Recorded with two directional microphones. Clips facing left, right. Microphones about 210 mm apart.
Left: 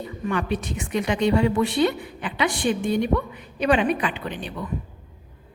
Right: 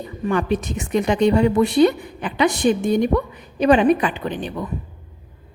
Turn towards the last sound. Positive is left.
turn(degrees=-40)  # may be behind; listen again after turning